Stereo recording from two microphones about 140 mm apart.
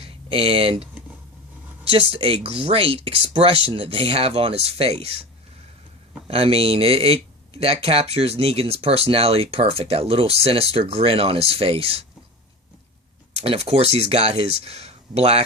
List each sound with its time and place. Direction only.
0.0 s speech: 45° right (ahead or behind)
6.2 s speech: 45° right (ahead or behind)
13.3 s speech: 45° right (ahead or behind)